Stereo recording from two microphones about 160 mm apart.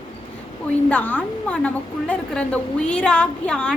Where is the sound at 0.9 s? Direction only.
10° left (ahead or behind).